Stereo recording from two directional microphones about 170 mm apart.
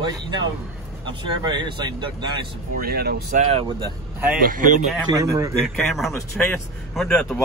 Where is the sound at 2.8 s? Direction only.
65° right (ahead or behind).